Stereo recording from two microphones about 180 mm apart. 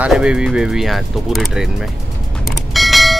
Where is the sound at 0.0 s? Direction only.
5° right (ahead or behind).